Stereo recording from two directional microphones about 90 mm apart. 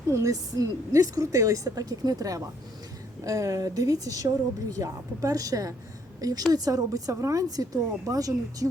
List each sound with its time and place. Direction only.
0.1 s a woman's voice: 35° right (ahead or behind)